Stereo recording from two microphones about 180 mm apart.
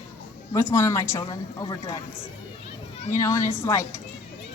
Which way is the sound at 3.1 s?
15° left (ahead or behind).